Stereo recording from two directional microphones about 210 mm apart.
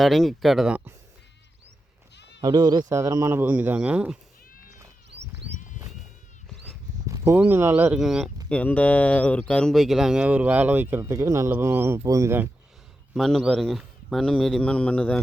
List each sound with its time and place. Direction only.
0.0 s a man's voice: centre (ahead or behind)
2.1 s bleat: 55° left (ahead or behind)
2.4 s speech: 15° right (ahead or behind)
5.1 s a sound: 5° right (ahead or behind)
7.1 s speech: 10° right (ahead or behind)
13.1 s a man's voice: centre (ahead or behind)